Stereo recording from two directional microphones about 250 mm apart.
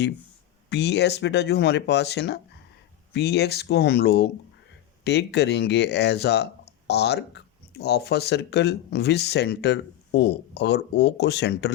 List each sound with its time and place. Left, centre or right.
0.7 s speech: left